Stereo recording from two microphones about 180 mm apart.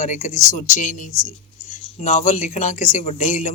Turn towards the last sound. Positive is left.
turn(degrees=40)  # may be behind; listen again after turning